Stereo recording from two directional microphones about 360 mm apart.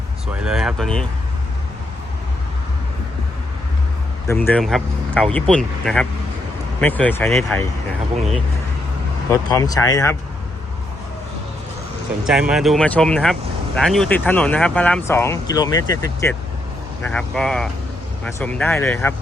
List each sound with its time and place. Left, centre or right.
0.4 s speech: centre
4.3 s speech: centre
8.1 s speech: centre
9.3 s speech: centre
12.2 s speech: centre